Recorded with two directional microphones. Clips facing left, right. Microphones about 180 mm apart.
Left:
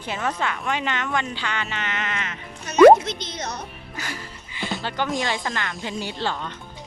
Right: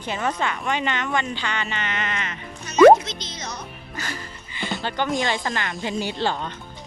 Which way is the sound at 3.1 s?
55° left (ahead or behind).